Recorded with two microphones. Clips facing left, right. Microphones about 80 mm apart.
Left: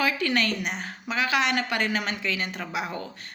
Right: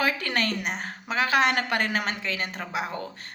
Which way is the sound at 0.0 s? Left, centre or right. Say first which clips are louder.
Left 1 dB; right.